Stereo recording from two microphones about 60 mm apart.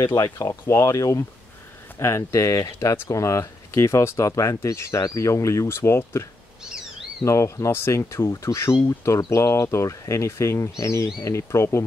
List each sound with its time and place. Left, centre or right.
0.0 s speech: left
0.5 s speech: left
3.1 s speech: left
7.2 s speech: left